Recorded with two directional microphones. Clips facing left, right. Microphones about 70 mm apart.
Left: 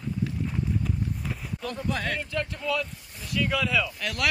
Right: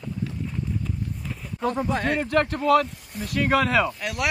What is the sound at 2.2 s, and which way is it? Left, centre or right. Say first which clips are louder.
Speech: right 9 dB; right.